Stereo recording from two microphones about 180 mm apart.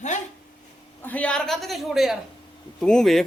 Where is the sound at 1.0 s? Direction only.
10° left (ahead or behind).